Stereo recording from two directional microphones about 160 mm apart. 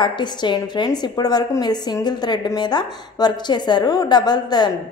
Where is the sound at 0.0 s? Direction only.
30° left (ahead or behind).